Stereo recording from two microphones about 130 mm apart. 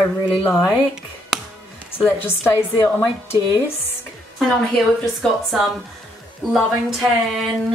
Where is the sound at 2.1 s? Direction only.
20° left (ahead or behind).